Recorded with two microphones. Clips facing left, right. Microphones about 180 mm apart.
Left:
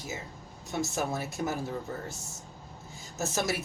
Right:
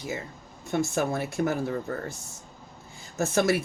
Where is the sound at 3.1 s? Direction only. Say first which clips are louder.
Right 7 dB; 55° right (ahead or behind).